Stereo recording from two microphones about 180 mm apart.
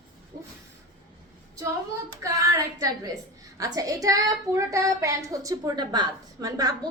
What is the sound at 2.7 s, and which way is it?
A woman's voice, 20° right (ahead or behind).